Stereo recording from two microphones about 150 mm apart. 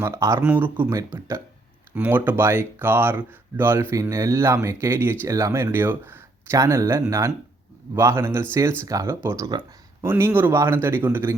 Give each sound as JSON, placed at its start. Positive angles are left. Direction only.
{"t": 0.0, "sound": "speech", "side_deg": -20}